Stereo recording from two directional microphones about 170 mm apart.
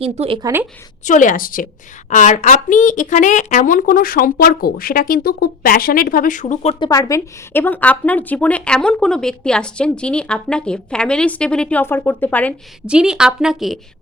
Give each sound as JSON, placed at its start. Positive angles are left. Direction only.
{"t": 0.0, "sound": "speech", "side_deg": -35}
{"t": 0.4, "sound": "a woman's voice", "side_deg": -15}
{"t": 1.0, "sound": "a woman's voice", "side_deg": 50}
{"t": 6.7, "sound": "a woman's voice", "side_deg": 25}
{"t": 12.8, "sound": "speech", "side_deg": -5}